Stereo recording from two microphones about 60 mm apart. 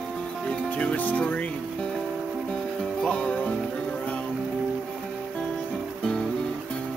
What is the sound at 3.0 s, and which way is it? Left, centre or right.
Music, centre.